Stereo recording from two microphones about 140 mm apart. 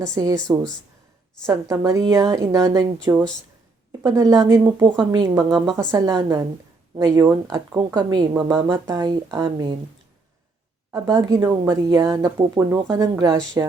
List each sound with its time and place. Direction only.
0.0 s speech: 25° right (ahead or behind)
4.9 s speech: 35° right (ahead or behind)
10.9 s speech: 20° right (ahead or behind)
11.4 s speech: 20° right (ahead or behind)